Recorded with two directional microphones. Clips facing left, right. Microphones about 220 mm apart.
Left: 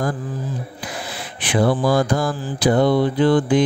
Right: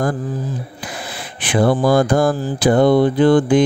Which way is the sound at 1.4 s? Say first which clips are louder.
Right 3 dB; 50° right (ahead or behind).